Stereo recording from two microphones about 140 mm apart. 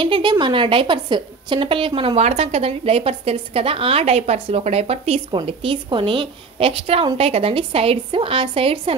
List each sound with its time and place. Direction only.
0.0 s a woman's voice: 35° right (ahead or behind)